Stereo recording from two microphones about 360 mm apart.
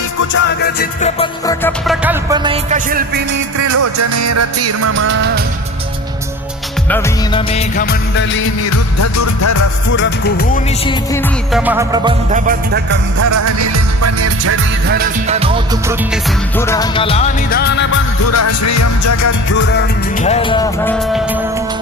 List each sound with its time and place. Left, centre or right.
0.3 s music of bollywood: left
1.2 s music: centre
2.0 s music: centre
3.6 s music: right
6.9 s music of bollywood: centre; by 8.8 s left
9.0 s music: left
9.9 s music of bollywood: left
11.5 s music: centre
12.5 s music: right
13.1 s music: right
14.8 s music: right
16.6 s music: centre; by 17.8 s left
18.3 s music: left
20.2 s music: centre